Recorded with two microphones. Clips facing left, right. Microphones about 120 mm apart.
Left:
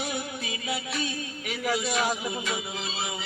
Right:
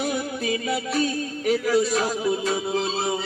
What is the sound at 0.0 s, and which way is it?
Music, 45° right (ahead or behind).